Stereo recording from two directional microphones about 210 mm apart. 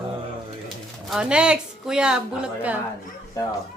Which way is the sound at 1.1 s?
5° right (ahead or behind).